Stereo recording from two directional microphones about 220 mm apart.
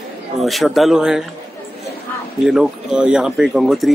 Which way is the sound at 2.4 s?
Centre (ahead or behind).